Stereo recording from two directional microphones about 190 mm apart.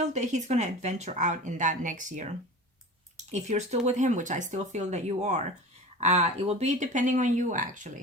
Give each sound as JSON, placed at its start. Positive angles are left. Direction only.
{"t": 0.0, "sound": "speech", "side_deg": -40}
{"t": 3.3, "sound": "speech", "side_deg": -40}